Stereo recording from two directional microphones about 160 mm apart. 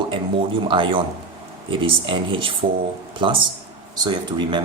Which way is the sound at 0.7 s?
35° right (ahead or behind).